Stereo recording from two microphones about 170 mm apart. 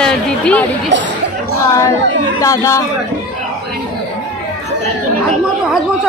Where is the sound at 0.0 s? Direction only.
5° left (ahead or behind).